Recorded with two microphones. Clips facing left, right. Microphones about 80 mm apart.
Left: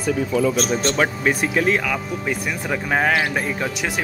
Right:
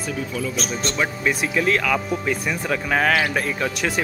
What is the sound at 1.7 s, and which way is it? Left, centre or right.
Speech, centre.